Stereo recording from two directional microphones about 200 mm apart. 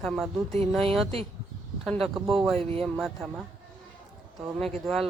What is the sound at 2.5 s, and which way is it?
Speech, 30° right (ahead or behind).